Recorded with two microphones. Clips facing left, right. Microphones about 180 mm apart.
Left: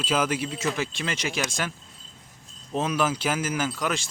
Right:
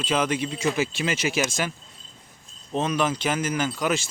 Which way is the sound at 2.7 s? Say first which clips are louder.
Right 1 dB; 5° left (ahead or behind).